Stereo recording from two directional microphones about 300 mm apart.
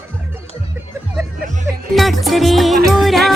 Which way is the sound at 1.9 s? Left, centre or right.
Centre.